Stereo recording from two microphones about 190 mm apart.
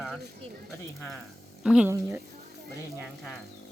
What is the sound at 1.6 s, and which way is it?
Speech, 5° right (ahead or behind).